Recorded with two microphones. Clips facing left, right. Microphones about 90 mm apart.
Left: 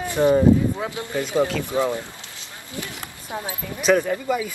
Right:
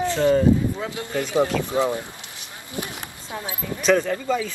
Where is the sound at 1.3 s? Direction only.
20° right (ahead or behind).